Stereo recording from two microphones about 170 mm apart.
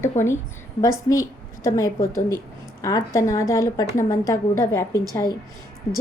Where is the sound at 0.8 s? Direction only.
20° left (ahead or behind).